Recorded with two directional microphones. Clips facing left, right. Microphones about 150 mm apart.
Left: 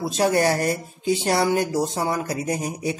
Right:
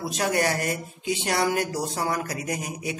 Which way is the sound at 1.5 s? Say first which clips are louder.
Left 5 dB; 25° left (ahead or behind).